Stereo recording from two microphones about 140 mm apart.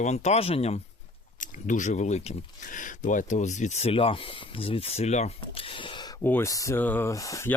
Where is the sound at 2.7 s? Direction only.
65° left (ahead or behind); by 6.1 s 35° left (ahead or behind).